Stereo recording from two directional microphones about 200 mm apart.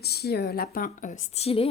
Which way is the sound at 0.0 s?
55° left (ahead or behind).